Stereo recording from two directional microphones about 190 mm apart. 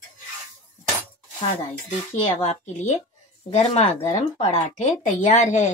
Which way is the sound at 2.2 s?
35° left (ahead or behind).